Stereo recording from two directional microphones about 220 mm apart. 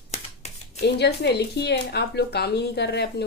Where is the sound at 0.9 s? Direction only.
50° left (ahead or behind).